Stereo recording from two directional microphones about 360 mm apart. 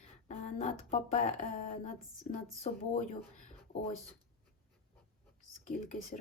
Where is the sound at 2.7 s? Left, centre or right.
Centre.